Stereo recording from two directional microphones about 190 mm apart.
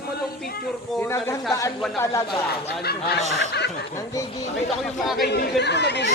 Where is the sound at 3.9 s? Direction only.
15° left (ahead or behind).